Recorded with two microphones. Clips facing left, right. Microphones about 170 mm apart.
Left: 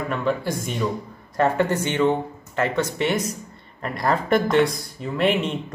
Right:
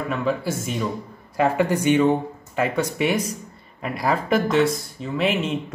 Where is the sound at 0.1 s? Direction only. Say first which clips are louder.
Even; 5° right (ahead or behind).